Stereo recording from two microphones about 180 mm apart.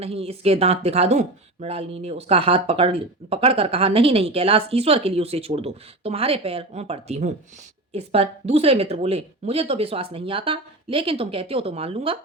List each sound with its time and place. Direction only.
0.0 s speech: 35° right (ahead or behind)